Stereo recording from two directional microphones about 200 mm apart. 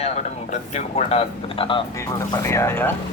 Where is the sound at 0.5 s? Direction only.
35° left (ahead or behind).